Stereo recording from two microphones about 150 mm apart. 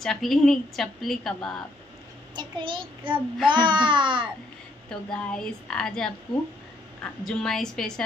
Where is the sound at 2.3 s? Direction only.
30° right (ahead or behind).